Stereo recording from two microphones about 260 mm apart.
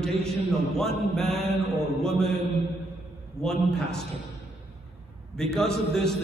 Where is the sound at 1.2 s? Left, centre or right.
Right.